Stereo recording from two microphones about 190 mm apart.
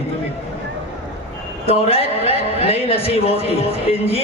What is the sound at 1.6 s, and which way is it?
A man's voice, 30° left (ahead or behind).